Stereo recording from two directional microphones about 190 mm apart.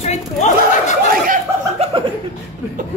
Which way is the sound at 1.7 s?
30° right (ahead or behind).